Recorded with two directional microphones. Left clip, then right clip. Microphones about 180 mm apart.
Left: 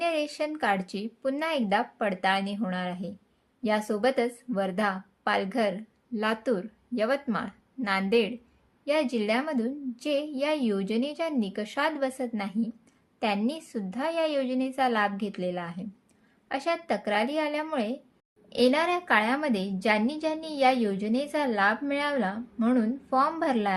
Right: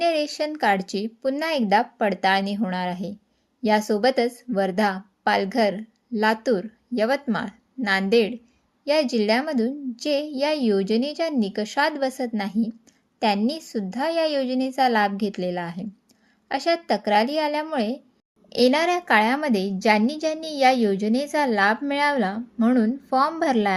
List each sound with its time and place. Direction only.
0.0 s a woman's voice: 30° right (ahead or behind)